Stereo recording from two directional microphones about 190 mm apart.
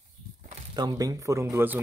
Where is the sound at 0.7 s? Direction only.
20° right (ahead or behind).